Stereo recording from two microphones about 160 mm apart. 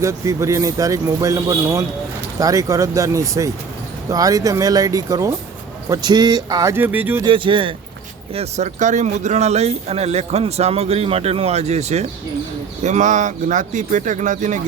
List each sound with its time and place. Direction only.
0.0 s speech: 20° right (ahead or behind)
7.3 s speech: 30° right (ahead or behind); by 14.6 s 50° right (ahead or behind)